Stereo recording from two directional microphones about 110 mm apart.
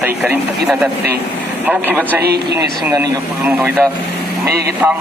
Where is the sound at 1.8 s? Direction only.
15° right (ahead or behind).